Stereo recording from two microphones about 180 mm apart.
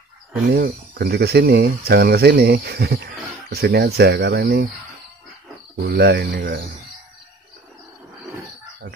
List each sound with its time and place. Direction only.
0.5 s speech: 60° right (ahead or behind)
5.9 s speech: 65° right (ahead or behind)